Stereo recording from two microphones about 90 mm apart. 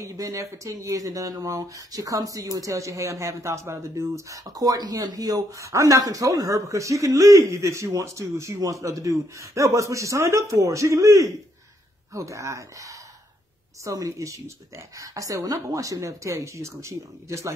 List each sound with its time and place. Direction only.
0.0 s speech: 35° right (ahead or behind)